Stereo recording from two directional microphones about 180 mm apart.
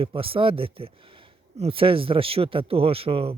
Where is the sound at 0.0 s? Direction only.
30° right (ahead or behind).